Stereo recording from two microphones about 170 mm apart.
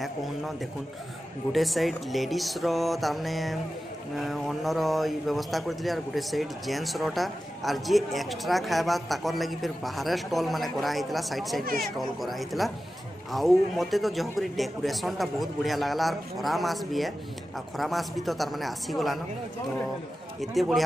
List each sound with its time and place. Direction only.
0.0 s speech: centre (ahead or behind)
11.6 s speech: 60° right (ahead or behind)
12.0 s speech: centre (ahead or behind)
20.3 s speech: centre (ahead or behind)